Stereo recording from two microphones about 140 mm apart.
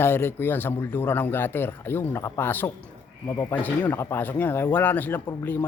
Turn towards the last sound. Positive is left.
turn(degrees=15)  # may be behind; listen again after turning